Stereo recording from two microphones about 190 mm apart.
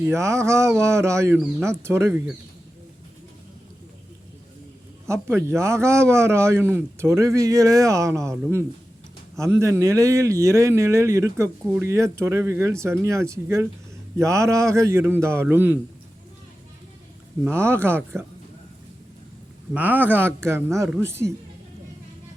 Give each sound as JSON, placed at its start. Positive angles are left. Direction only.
{"t": 0.0, "sound": "a man's voice", "side_deg": -15}
{"t": 5.0, "sound": "a man's voice", "side_deg": -15}
{"t": 17.5, "sound": "a man's voice", "side_deg": -15}
{"t": 19.7, "sound": "a man's voice", "side_deg": -10}